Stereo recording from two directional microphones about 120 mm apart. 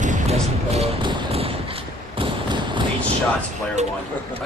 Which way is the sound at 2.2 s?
40° right (ahead or behind).